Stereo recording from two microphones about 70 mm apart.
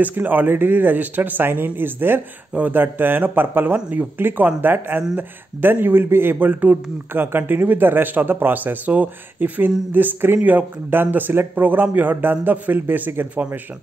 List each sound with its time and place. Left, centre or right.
0.0 s a man's voice: right